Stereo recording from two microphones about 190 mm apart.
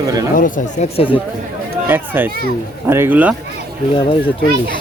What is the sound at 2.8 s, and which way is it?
Speech, 10° right (ahead or behind).